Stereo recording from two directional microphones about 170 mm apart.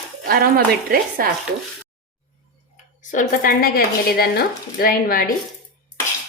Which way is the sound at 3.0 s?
50° left (ahead or behind).